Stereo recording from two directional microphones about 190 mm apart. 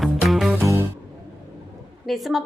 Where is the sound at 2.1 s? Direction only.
Centre (ahead or behind).